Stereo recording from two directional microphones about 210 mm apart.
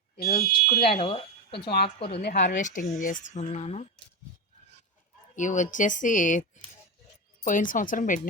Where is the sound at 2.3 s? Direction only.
35° left (ahead or behind).